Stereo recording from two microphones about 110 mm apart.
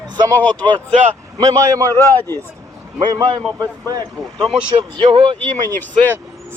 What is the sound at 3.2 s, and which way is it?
Speech, 35° right (ahead or behind).